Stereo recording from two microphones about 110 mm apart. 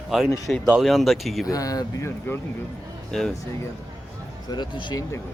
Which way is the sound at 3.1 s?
5° left (ahead or behind).